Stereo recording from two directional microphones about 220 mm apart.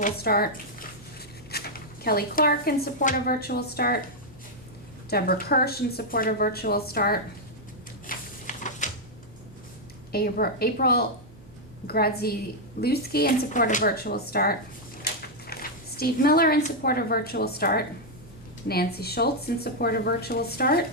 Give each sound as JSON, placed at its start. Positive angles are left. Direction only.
{"t": 0.0, "sound": "speech", "side_deg": 45}
{"t": 5.0, "sound": "speech", "side_deg": 45}
{"t": 8.0, "sound": "a sound", "side_deg": 35}
{"t": 10.1, "sound": "speech", "side_deg": 45}